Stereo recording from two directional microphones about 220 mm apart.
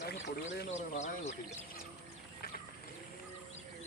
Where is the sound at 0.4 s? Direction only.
45° left (ahead or behind).